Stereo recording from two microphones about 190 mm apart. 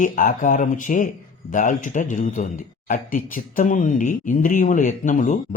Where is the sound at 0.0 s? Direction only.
45° left (ahead or behind).